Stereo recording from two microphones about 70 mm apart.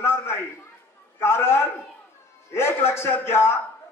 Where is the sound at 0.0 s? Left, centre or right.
Left.